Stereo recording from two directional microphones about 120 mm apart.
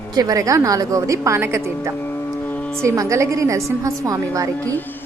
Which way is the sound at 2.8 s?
25° right (ahead or behind).